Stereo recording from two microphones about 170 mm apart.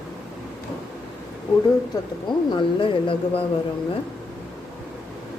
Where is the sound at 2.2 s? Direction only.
30° left (ahead or behind).